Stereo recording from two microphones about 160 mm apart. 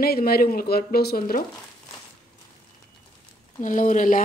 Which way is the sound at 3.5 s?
55° left (ahead or behind).